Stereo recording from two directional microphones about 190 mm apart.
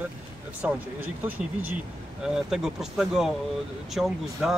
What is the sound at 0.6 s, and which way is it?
Speech, 10° right (ahead or behind).